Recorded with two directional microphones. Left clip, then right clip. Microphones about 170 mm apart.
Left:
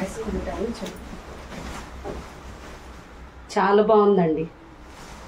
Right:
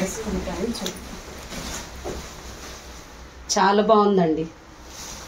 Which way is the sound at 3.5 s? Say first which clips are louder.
Even; 25° left (ahead or behind).